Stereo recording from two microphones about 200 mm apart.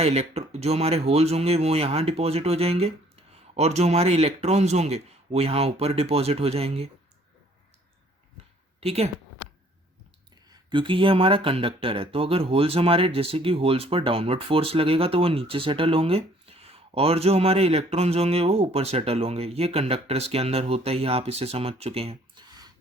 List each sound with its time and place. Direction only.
0.0 s speech: 30° right (ahead or behind)
8.8 s speech: 30° right (ahead or behind)
10.5 s speech: 25° right (ahead or behind)